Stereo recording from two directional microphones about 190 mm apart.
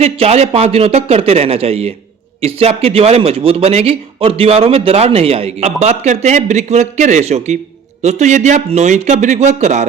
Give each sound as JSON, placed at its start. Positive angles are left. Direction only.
{"t": 0.0, "sound": "speech", "side_deg": -35}